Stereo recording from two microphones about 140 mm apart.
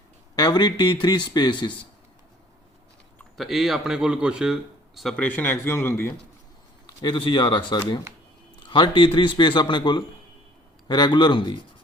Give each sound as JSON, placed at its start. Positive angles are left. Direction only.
{"t": 0.3, "sound": "speech", "side_deg": 30}
{"t": 3.3, "sound": "speech", "side_deg": 0}
{"t": 6.8, "sound": "speech", "side_deg": 30}